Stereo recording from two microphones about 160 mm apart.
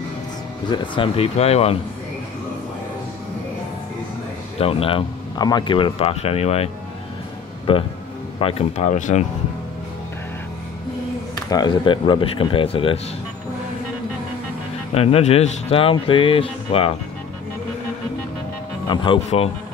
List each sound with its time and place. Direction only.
0.7 s speech: 30° left (ahead or behind)
4.6 s speech: 35° left (ahead or behind)
11.5 s speech: 30° left (ahead or behind)
15.0 s speech: 40° left (ahead or behind)
18.9 s speech: 35° left (ahead or behind)